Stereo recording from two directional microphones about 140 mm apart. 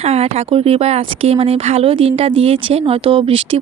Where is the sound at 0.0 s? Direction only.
45° right (ahead or behind).